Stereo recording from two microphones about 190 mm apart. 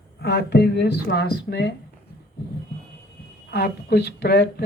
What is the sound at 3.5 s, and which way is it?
Speech, 55° left (ahead or behind).